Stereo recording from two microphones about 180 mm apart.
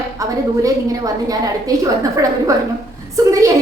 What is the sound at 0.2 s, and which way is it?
A woman's voice, 20° right (ahead or behind).